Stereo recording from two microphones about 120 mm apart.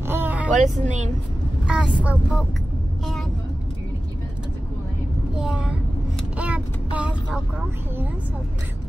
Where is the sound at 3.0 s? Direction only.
Centre (ahead or behind).